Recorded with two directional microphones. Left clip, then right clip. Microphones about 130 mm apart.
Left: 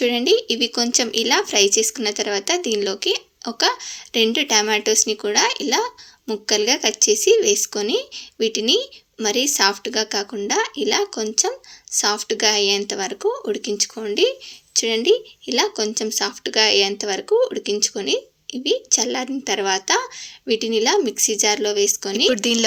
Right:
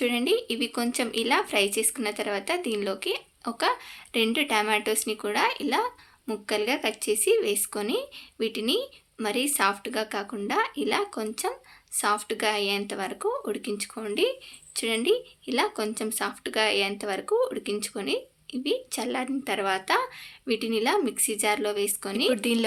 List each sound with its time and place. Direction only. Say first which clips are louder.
0.0 s speech: left 8 dB; 30° left (ahead or behind)